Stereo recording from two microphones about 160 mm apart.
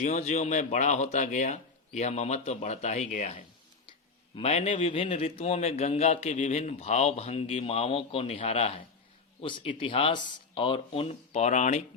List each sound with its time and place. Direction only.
0.0 s a man's voice: 45° left (ahead or behind)